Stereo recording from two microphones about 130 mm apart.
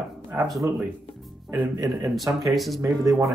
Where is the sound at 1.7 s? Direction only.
25° right (ahead or behind).